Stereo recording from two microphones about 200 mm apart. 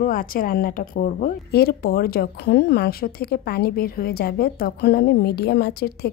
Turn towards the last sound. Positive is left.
turn(degrees=55)  # may be behind; listen again after turning